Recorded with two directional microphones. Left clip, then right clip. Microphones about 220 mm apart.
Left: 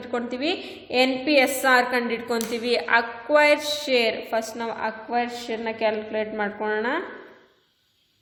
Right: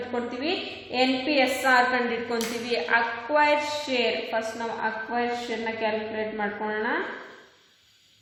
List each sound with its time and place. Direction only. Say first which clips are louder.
0.1 s a woman's voice: left 4 dB; 50° left (ahead or behind)